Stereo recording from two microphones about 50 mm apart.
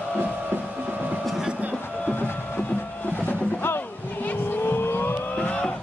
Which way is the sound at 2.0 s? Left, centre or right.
Left.